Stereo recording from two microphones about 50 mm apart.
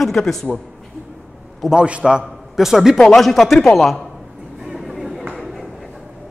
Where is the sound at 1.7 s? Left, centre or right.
Centre.